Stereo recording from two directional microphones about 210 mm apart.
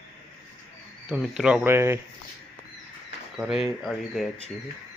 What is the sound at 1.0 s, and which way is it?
Speech, 5° right (ahead or behind).